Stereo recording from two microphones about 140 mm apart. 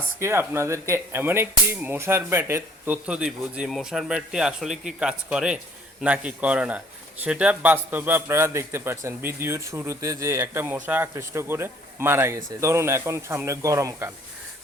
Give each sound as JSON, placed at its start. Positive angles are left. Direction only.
{"t": 0.2, "sound": "a man's voice", "side_deg": -15}